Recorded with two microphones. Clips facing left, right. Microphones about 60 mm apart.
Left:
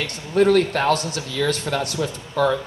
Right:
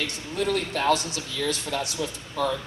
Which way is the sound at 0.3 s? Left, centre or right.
Left.